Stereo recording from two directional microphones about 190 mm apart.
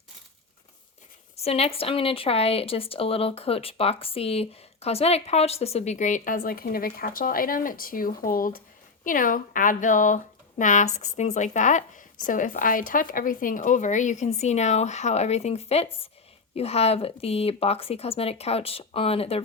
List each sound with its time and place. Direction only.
1.4 s speech: 30° left (ahead or behind)